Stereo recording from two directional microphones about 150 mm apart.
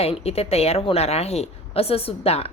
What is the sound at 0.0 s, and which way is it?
A woman's voice, 40° left (ahead or behind).